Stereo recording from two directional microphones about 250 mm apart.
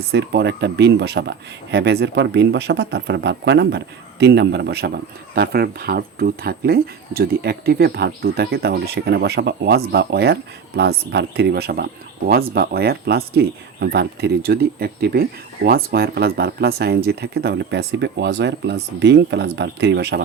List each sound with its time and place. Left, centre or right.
0.1 s speech: right